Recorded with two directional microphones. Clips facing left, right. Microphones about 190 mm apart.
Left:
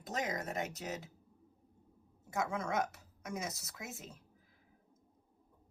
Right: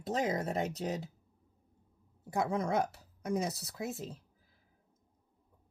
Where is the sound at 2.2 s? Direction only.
35° right (ahead or behind).